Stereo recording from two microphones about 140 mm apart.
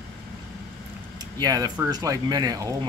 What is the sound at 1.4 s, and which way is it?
Speech, 25° right (ahead or behind).